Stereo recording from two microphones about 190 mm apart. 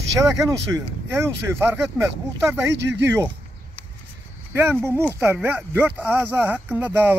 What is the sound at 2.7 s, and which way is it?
Speech, 65° right (ahead or behind).